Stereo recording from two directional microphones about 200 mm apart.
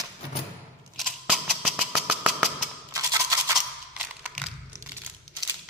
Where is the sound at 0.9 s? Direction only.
Centre (ahead or behind).